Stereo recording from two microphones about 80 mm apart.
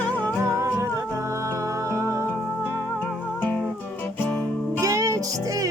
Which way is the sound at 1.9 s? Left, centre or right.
Right.